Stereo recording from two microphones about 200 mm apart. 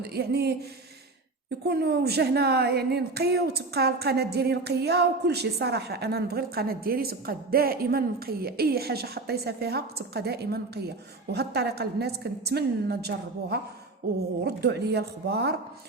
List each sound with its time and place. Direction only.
0.0 s speech: 55° right (ahead or behind)
1.6 s speech: 55° right (ahead or behind)